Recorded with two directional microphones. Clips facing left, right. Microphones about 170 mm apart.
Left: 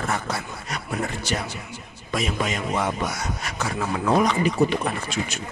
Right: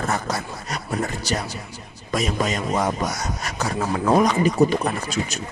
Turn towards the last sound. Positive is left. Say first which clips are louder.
# right 2 dB
turn(degrees=-40)  # may be behind; listen again after turning